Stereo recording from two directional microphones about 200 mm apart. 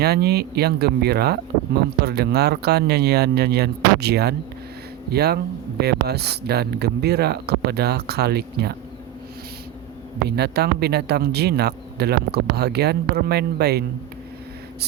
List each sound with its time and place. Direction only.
0.0 s speech: 55° right (ahead or behind)
10.2 s speech: 55° right (ahead or behind)